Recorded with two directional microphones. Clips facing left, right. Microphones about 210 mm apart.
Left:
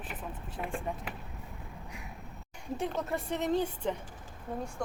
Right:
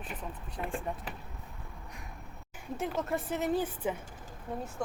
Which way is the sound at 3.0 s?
Centre (ahead or behind).